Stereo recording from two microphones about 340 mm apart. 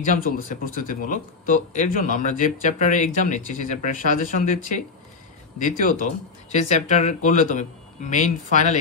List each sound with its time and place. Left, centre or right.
0.0 s speech: left